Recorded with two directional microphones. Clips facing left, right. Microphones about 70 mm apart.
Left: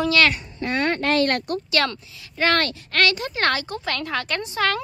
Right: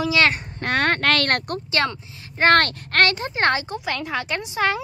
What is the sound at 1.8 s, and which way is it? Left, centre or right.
Speech, right.